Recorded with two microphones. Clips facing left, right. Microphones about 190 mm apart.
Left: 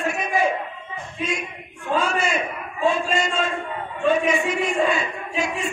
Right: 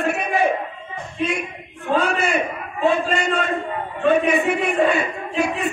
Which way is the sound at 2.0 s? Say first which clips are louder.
Right 2 dB; 60° right (ahead or behind).